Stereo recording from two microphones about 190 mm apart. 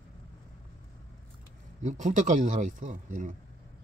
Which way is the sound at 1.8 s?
40° right (ahead or behind).